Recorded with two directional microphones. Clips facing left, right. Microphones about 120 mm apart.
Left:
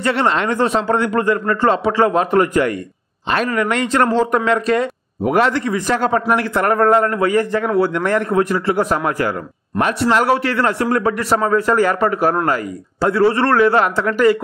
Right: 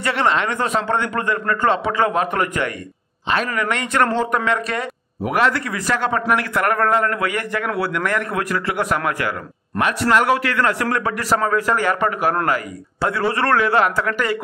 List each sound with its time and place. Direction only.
0.0 s a man's voice: 35° left (ahead or behind)
5.9 s a man's voice: 35° left (ahead or behind)